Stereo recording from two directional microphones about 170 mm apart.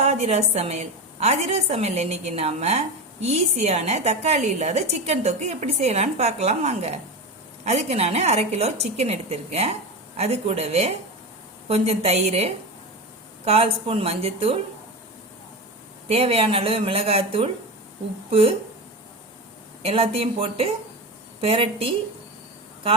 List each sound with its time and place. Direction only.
0.0 s a woman's voice: 40° right (ahead or behind)
16.0 s a woman's voice: 35° right (ahead or behind)
19.8 s a woman's voice: 35° right (ahead or behind)